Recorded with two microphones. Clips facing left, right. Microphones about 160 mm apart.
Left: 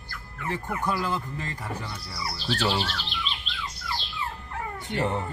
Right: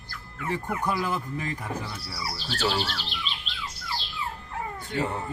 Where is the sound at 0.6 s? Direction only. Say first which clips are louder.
Even; 15° right (ahead or behind).